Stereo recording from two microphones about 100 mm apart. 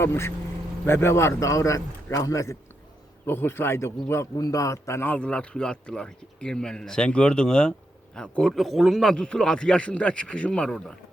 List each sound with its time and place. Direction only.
0.0 s a man's voice: 25° left (ahead or behind)
4.4 s a man's voice: 35° left (ahead or behind); by 10.9 s 5° left (ahead or behind)